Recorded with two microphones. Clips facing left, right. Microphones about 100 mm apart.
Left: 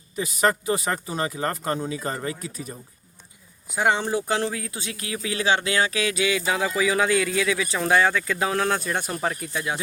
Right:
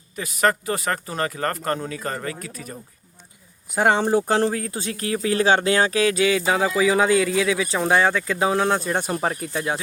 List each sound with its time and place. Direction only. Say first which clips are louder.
0.2 s speech: right 1 dB; 20° left (ahead or behind)
3.8 s speech: right 4 dB; 40° right (ahead or behind)